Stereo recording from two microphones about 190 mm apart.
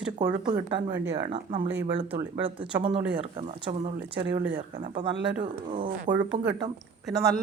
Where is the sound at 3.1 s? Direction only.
30° right (ahead or behind).